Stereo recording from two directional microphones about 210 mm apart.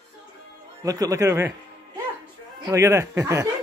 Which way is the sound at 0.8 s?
15° right (ahead or behind).